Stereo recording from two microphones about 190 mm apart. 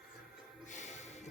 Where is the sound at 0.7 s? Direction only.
40° left (ahead or behind).